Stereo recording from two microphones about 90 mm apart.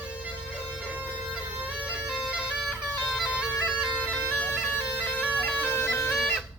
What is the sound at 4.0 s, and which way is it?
Bagpipes, 15° left (ahead or behind).